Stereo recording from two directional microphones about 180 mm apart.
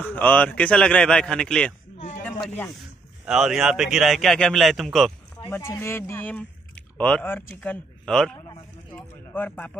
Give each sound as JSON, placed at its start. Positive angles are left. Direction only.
{"t": 0.0, "sound": "a man's voice", "side_deg": 10}
{"t": 2.0, "sound": "a sound", "side_deg": 45}
{"t": 2.2, "sound": "snake", "side_deg": 10}
{"t": 3.3, "sound": "a man's voice", "side_deg": 0}
{"t": 5.5, "sound": "speech", "side_deg": 15}